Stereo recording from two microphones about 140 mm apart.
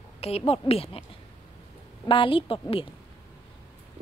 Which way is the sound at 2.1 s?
40° left (ahead or behind).